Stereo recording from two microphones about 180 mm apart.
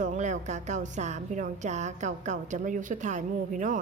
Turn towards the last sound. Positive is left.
turn(degrees=-45)  # may be behind; listen again after turning